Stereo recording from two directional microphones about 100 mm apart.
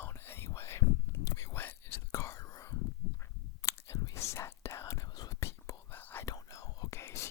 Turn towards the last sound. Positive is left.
turn(degrees=25)  # may be behind; listen again after turning